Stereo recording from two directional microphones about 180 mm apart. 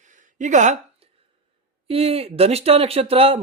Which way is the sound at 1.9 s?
35° right (ahead or behind).